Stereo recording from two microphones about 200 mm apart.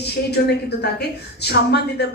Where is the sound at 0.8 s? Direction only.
55° left (ahead or behind).